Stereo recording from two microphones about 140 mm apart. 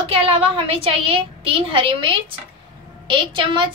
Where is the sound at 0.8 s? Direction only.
40° right (ahead or behind).